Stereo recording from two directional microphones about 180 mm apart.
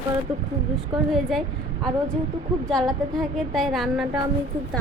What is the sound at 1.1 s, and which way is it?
Speech, centre (ahead or behind).